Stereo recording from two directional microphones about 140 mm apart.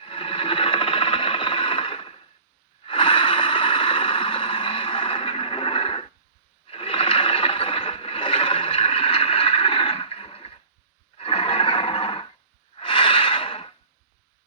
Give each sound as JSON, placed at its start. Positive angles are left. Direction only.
{"t": 0.0, "sound": "a sound", "side_deg": 40}
{"t": 11.2, "sound": "neigh", "side_deg": 40}
{"t": 12.7, "sound": "snort", "side_deg": 40}